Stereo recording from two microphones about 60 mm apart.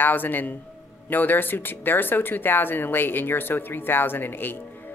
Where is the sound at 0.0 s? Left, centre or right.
Left.